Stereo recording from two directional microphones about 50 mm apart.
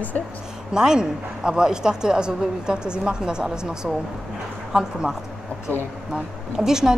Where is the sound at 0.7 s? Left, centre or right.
Centre.